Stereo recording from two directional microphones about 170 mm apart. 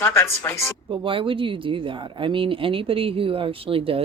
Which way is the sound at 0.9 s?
30° right (ahead or behind).